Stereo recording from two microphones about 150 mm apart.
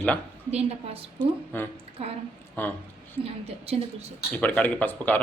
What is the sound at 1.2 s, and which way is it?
Speech, 15° left (ahead or behind).